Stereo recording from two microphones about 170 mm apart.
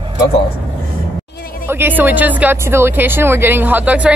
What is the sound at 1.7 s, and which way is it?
Speech, 10° right (ahead or behind).